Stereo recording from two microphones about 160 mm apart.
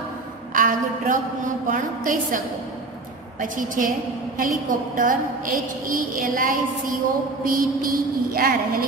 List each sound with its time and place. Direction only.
0.6 s a woman's voice: 55° right (ahead or behind)